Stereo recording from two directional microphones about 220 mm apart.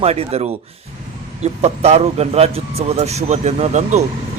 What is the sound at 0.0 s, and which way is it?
Speech, 30° right (ahead or behind).